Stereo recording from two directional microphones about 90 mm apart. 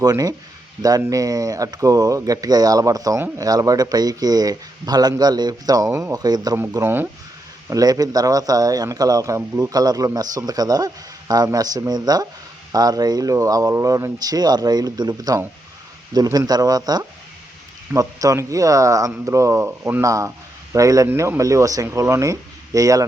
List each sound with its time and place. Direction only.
0.0 s speech: 45° right (ahead or behind)
5.9 s speech: 30° right (ahead or behind)
6.1 s speech: 45° right (ahead or behind)
6.8 s speech: 20° right (ahead or behind)
7.7 s speech: 45° right (ahead or behind)